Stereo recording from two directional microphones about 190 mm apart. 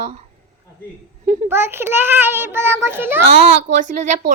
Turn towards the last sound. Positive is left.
turn(degrees=-40)  # may be behind; listen again after turning